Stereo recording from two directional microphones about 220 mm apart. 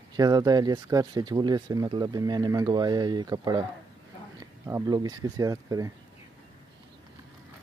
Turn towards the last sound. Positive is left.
turn(degrees=-15)  # may be behind; listen again after turning